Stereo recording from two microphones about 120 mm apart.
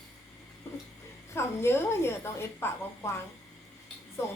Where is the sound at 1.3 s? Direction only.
20° left (ahead or behind).